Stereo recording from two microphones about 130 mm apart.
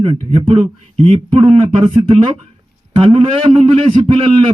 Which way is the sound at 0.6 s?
50° right (ahead or behind).